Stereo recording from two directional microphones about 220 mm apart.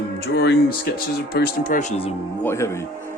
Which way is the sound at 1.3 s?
40° left (ahead or behind).